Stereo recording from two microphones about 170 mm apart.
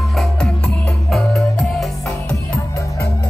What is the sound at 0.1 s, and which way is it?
Music, centre (ahead or behind).